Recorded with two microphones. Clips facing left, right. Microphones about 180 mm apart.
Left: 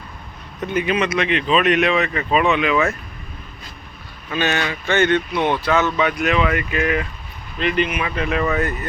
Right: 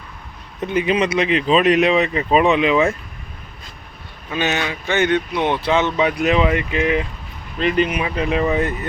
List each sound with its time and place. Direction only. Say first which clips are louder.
0.6 s speech: right 2 dB; 25° right (ahead or behind)
4.3 s speech: even; 15° right (ahead or behind)
7.6 s speech: right 2 dB; 40° right (ahead or behind)
8.0 s speech: right 2 dB; 25° right (ahead or behind)